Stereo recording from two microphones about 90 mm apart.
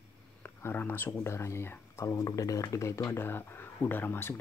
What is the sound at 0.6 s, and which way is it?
Speech, 20° left (ahead or behind).